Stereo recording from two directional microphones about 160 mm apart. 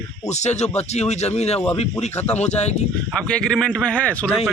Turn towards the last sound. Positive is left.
turn(degrees=10)  # may be behind; listen again after turning